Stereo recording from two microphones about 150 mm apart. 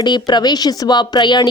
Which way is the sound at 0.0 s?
30° left (ahead or behind).